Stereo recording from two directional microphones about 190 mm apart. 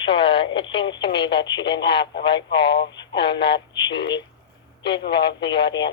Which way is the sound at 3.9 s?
70° left (ahead or behind).